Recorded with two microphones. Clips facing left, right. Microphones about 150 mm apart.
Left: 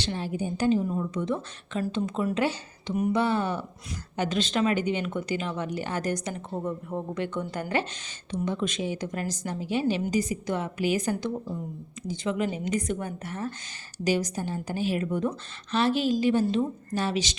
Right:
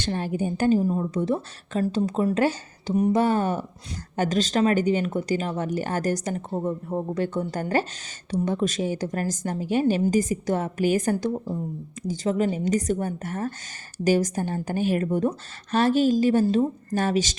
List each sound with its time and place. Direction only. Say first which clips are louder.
0.0 s a woman's voice: right 4 dB; 50° right (ahead or behind)
0.8 s speech: right 4 dB; 35° right (ahead or behind)
6.6 s a woman's voice: right 3 dB; 30° right (ahead or behind); by 17.3 s 45° right (ahead or behind)